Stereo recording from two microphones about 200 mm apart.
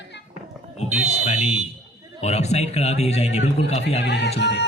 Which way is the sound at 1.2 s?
35° left (ahead or behind).